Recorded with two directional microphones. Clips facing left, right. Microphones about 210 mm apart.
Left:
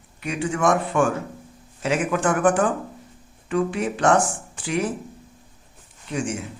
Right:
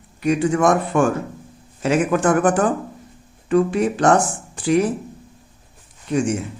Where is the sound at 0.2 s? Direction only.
40° right (ahead or behind).